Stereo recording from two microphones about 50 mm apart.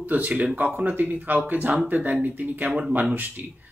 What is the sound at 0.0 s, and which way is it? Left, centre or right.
Speech, right.